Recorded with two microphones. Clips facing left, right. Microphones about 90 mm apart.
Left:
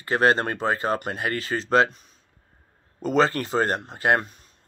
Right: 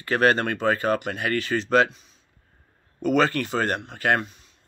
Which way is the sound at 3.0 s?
30° left (ahead or behind).